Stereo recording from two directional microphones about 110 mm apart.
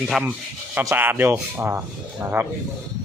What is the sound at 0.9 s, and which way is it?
Speech, 20° right (ahead or behind).